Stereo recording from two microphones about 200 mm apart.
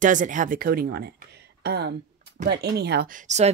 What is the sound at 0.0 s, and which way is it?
Speech, 40° right (ahead or behind).